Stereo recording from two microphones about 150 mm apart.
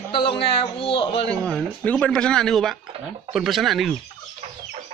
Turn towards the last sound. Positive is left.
turn(degrees=0)  # may be behind; listen again after turning